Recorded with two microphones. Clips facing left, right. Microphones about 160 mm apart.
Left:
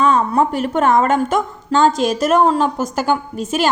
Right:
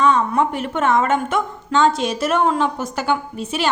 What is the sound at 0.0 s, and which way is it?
A woman's voice, 35° left (ahead or behind).